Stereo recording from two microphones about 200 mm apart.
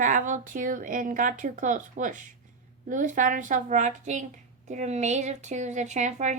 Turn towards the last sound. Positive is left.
turn(degrees=-35)  # may be behind; listen again after turning